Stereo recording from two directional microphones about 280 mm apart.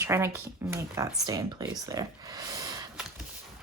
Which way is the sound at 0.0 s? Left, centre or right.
Centre.